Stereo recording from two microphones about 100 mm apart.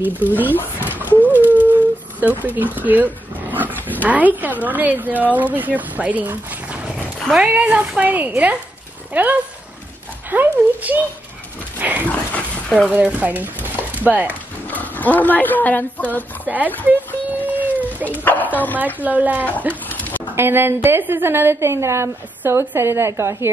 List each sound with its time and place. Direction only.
0.0 s a woman's voice: 15° right (ahead or behind)
0.7 s a sound: 15° right (ahead or behind)
1.2 s howl: 15° right (ahead or behind)
2.9 s a woman's voice: 20° right (ahead or behind)
12.1 s a sound: 15° left (ahead or behind)
12.9 s speech: 15° right (ahead or behind)
14.7 s speech: 15° left (ahead or behind)
16.4 s a woman's voice: 15° right (ahead or behind)
17.5 s cat: 15° right (ahead or behind)
18.0 s speech: 15° left (ahead or behind)
18.9 s a woman's voice: 15° right (ahead or behind)
19.7 s a sound: 15° left (ahead or behind)
20.3 s a woman's voice: 25° right (ahead or behind)